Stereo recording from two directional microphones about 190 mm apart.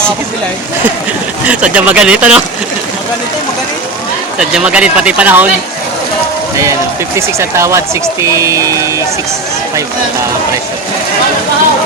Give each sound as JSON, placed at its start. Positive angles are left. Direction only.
{"t": 1.5, "sound": "speech", "side_deg": -5}
{"t": 4.4, "sound": "speech", "side_deg": -5}
{"t": 7.2, "sound": "speech", "side_deg": -15}